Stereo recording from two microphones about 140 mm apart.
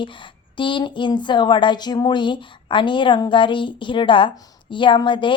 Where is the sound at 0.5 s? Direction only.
35° left (ahead or behind).